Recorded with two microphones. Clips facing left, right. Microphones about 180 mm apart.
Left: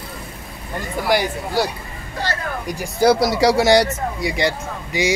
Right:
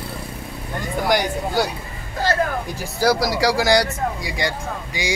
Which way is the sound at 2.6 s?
20° left (ahead or behind).